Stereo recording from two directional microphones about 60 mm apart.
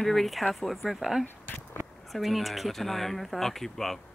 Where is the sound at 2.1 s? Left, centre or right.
Centre.